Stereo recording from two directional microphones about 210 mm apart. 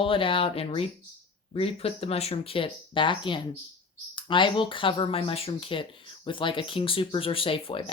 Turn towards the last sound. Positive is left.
turn(degrees=25)  # may be behind; listen again after turning